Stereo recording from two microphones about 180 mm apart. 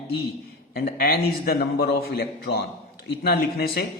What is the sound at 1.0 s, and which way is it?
A man's voice, 55° left (ahead or behind).